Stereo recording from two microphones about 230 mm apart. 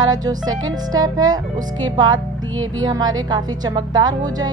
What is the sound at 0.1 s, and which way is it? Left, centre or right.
Speech, centre.